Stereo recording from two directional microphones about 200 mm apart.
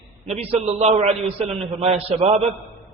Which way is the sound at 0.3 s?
30° right (ahead or behind).